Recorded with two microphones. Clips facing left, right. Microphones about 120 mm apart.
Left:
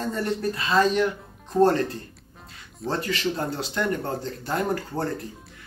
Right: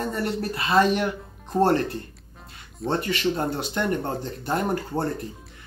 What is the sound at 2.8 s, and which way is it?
Speech, centre (ahead or behind).